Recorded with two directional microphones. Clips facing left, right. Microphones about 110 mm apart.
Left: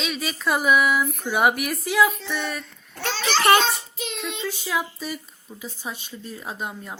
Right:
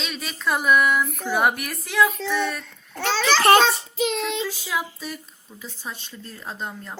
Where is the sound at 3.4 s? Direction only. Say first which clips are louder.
Right 2 dB; 30° right (ahead or behind).